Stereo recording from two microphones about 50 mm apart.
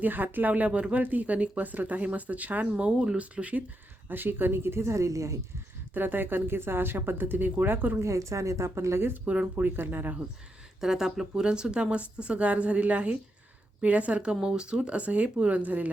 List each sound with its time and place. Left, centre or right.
0.0 s speech: right
4.1 s speech: right
5.9 s speech: right
8.0 s speech: right
9.2 s speech: right
9.6 s speech: right
10.8 s speech: centre; by 15.9 s right